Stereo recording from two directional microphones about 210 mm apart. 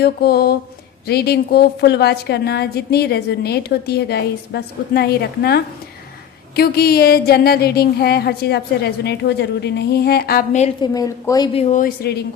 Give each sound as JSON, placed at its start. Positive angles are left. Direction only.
{"t": 0.0, "sound": "a woman's voice", "side_deg": 50}
{"t": 10.6, "sound": "a woman's voice", "side_deg": 20}
{"t": 11.7, "sound": "a woman's voice", "side_deg": 45}